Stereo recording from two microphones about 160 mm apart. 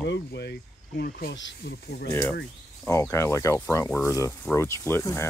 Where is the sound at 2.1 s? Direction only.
15° left (ahead or behind).